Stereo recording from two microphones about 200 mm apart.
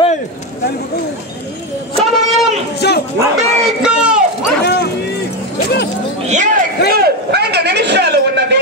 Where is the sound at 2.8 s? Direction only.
55° left (ahead or behind).